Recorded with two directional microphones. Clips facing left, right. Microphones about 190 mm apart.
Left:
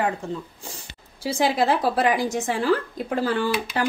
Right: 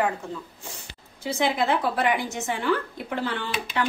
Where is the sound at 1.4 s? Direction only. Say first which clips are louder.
Left 3 dB; 35° left (ahead or behind).